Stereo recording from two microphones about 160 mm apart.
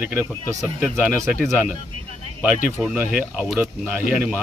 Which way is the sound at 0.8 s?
10° right (ahead or behind).